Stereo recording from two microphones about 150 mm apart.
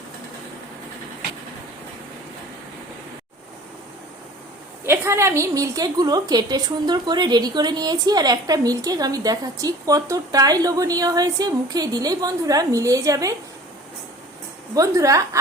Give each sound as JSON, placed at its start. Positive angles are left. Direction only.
{"t": 4.9, "sound": "a woman's voice", "side_deg": -15}
{"t": 14.8, "sound": "a woman's voice", "side_deg": -20}